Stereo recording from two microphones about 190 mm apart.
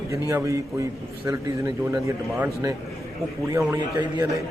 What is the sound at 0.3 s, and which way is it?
Speech, 15° right (ahead or behind).